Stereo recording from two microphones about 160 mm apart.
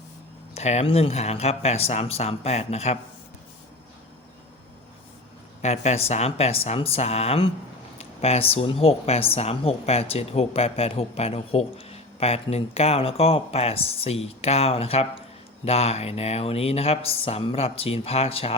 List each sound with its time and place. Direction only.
0.5 s speech: 40° left (ahead or behind)
5.6 s speech: 45° left (ahead or behind)